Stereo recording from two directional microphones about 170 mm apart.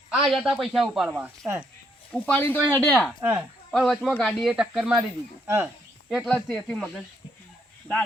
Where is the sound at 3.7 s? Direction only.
Centre (ahead or behind).